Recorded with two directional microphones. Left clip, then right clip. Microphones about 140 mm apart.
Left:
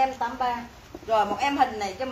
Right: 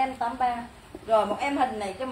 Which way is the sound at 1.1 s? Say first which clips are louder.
Left 1 dB; 20° right (ahead or behind).